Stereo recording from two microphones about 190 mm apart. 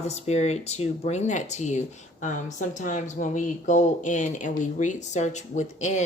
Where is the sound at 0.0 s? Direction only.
35° left (ahead or behind).